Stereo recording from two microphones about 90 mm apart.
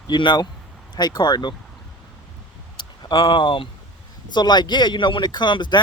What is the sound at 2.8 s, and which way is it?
Speech, 55° left (ahead or behind).